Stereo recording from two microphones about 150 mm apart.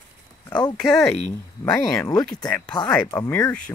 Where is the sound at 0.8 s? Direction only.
5° left (ahead or behind).